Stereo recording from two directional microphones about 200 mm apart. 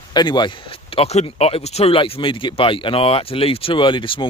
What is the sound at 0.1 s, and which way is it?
Speech, 20° left (ahead or behind).